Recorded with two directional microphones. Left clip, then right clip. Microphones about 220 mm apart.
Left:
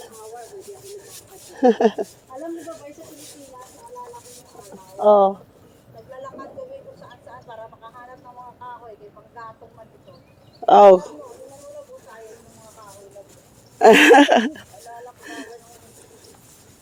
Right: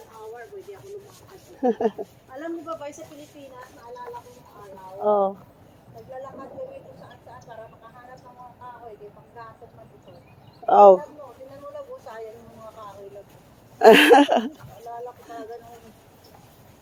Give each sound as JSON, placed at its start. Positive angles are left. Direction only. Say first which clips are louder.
{"t": 1.5, "sound": "speech", "louder": "left 7 dB", "side_deg": 55}
{"t": 4.9, "sound": "speech", "louder": "left 7 dB", "side_deg": 55}
{"t": 6.6, "sound": "vehicle", "louder": "right 1 dB", "side_deg": 60}
{"t": 9.4, "sound": "clip-clop", "louder": "left 4 dB", "side_deg": 60}
{"t": 10.7, "sound": "speech", "louder": "left 3 dB", "side_deg": 60}
{"t": 13.7, "sound": "a sound", "louder": "left 2 dB", "side_deg": 30}